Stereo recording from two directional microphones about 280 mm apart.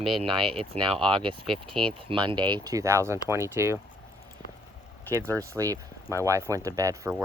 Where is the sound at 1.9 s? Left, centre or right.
Centre.